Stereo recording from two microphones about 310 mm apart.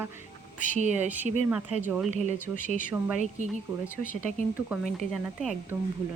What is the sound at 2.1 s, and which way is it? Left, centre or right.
Speech, right.